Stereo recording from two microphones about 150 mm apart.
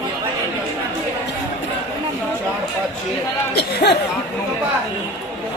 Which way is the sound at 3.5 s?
90° left.